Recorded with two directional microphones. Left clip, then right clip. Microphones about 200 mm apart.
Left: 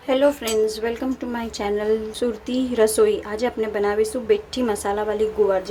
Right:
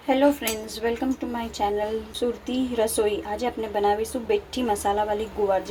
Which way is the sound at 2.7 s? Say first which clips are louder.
Left 6 dB; 15° left (ahead or behind).